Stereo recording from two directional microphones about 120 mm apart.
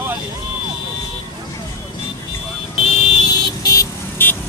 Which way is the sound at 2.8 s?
55° left (ahead or behind).